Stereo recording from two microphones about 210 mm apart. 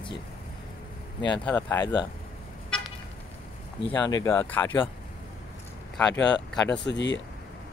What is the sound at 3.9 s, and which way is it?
Speech, 15° left (ahead or behind).